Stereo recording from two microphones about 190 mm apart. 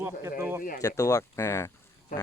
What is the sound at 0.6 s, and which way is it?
Speech, 45° left (ahead or behind).